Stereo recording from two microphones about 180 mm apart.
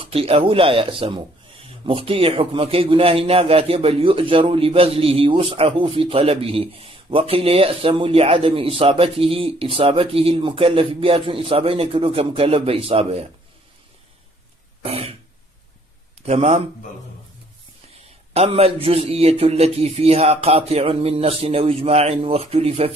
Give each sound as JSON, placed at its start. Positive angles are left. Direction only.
{"t": 0.0, "sound": "speech", "side_deg": -30}
{"t": 14.8, "sound": "throat clearing", "side_deg": -35}
{"t": 16.3, "sound": "speech", "side_deg": -35}
{"t": 18.3, "sound": "speech", "side_deg": -35}